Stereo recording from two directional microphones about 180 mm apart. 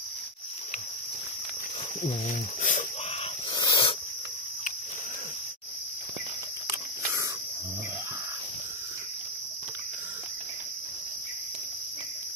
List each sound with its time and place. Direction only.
2.0 s speech: 45° left (ahead or behind)
3.5 s dog: 25° left (ahead or behind)